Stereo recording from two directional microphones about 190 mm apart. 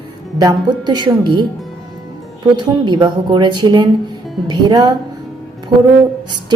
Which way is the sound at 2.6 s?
25° right (ahead or behind).